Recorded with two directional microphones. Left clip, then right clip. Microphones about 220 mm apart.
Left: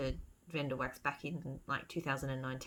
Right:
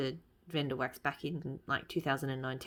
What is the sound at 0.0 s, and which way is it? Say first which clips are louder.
Speech: right 3 dB; 35° right (ahead or behind).